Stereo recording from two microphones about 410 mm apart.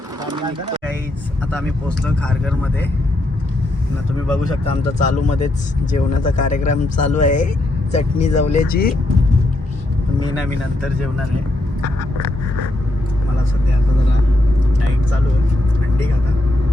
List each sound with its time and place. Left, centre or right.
4.4 s speech: centre